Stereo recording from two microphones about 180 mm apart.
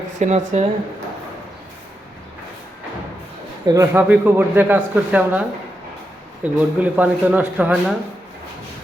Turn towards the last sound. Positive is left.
turn(degrees=-10)  # may be behind; listen again after turning